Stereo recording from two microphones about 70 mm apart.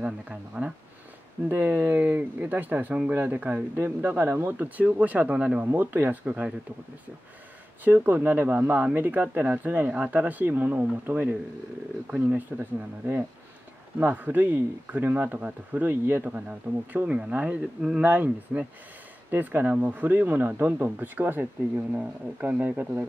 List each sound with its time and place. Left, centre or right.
0.0 s speech: centre
1.5 s speech: right
5.6 s speech: right
7.8 s speech: right
12.4 s speech: right
16.3 s speech: right